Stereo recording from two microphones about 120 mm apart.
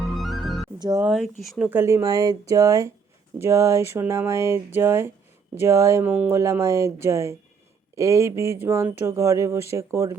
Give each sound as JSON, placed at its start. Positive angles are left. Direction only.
{"t": 0.0, "sound": "music", "side_deg": 0}
{"t": 1.0, "sound": "speech", "side_deg": -5}
{"t": 1.8, "sound": "speech", "side_deg": -25}